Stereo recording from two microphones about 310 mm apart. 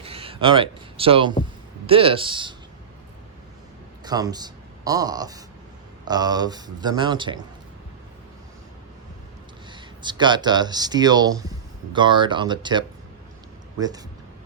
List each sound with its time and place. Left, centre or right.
0.0 s speech: centre
4.0 s a man's voice: centre
9.7 s speech: centre